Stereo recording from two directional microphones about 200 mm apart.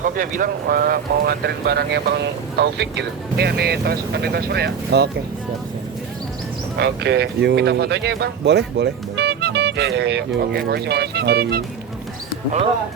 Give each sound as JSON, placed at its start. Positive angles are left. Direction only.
{"t": 0.0, "sound": "speech", "side_deg": -40}
{"t": 6.7, "sound": "speech", "side_deg": -55}